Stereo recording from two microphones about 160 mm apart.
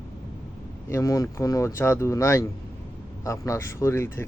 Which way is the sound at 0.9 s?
20° left (ahead or behind).